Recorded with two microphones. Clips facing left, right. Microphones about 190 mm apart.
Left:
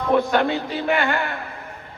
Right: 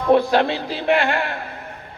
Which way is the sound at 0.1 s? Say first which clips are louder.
Right 3 dB; 30° right (ahead or behind).